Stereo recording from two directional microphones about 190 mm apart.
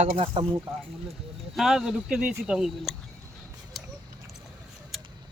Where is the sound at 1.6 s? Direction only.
Centre (ahead or behind).